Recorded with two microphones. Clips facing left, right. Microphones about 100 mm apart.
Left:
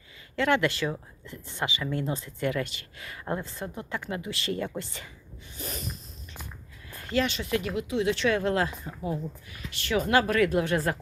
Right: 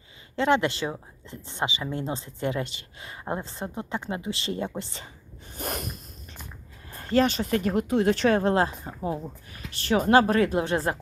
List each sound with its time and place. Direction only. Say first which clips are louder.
0.3 s speech: right 2 dB; 25° right (ahead or behind)
5.5 s snort: right 5 dB; 55° right (ahead or behind)
6.9 s speech: right 5 dB; 35° right (ahead or behind)